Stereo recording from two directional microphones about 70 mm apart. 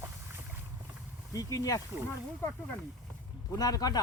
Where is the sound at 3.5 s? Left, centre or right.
Left.